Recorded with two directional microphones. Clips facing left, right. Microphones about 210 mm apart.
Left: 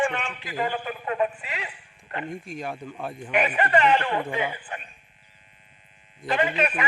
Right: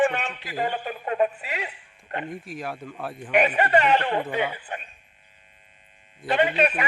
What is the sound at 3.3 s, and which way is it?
A man's voice, 40° right (ahead or behind).